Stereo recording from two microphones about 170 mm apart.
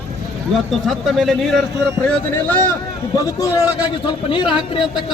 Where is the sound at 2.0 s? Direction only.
10° left (ahead or behind); by 4.4 s 25° left (ahead or behind).